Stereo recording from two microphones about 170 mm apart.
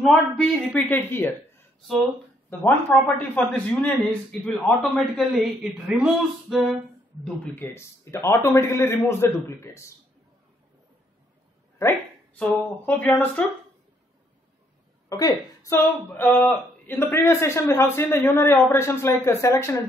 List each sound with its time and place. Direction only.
0.0 s a woman's voice: 5° left (ahead or behind)
2.6 s a man's voice: 5° left (ahead or behind)
7.2 s a woman's voice: 10° left (ahead or behind)
12.4 s a woman's voice: 10° left (ahead or behind)
15.0 s a woman's voice: 20° left (ahead or behind)